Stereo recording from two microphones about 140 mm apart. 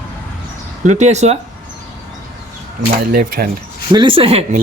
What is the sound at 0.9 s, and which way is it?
Speech, 55° right (ahead or behind).